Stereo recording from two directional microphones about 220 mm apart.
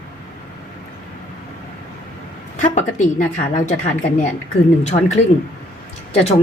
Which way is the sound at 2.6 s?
35° left (ahead or behind).